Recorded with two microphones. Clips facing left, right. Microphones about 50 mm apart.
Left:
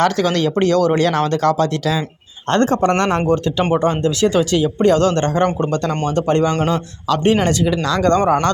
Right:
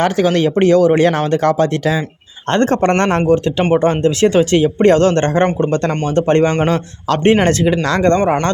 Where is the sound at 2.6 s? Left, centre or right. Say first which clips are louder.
Right 2 dB; right.